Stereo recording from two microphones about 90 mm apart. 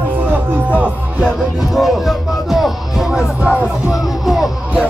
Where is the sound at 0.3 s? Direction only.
15° right (ahead or behind).